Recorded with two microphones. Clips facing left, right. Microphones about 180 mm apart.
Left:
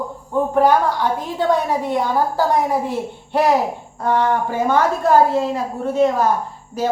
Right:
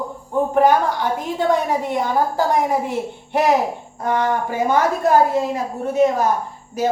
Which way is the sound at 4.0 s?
15° right (ahead or behind).